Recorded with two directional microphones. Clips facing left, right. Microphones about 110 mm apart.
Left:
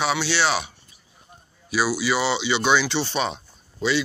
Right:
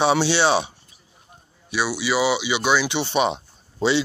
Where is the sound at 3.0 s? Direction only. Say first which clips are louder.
Right 4 dB; 20° right (ahead or behind).